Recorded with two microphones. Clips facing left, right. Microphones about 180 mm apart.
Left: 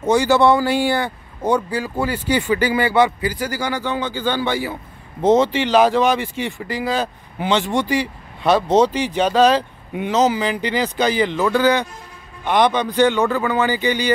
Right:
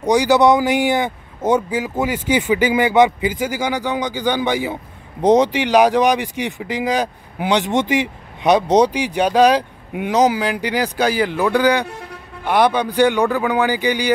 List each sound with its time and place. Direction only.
0.0 s speech: 15° right (ahead or behind)